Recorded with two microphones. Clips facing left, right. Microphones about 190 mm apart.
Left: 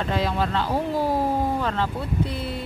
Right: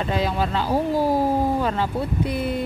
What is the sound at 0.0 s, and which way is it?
Speech, centre (ahead or behind).